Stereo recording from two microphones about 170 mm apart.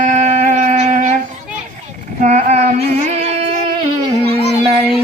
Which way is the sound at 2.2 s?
45° right (ahead or behind).